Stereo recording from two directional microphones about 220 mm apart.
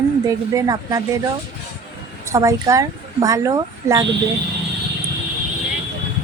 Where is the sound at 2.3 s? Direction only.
15° right (ahead or behind).